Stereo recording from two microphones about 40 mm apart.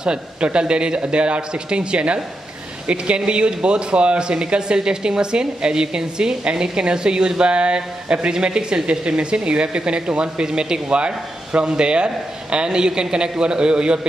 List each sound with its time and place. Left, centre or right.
0.0 s speech: right